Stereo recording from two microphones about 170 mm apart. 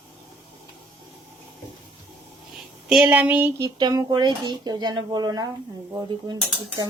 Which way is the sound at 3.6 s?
20° right (ahead or behind).